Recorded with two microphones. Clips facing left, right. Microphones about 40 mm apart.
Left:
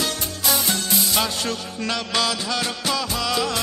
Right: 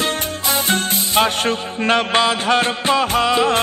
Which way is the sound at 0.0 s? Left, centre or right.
Right.